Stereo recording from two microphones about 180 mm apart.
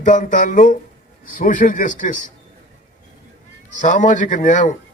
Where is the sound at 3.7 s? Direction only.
45° left (ahead or behind).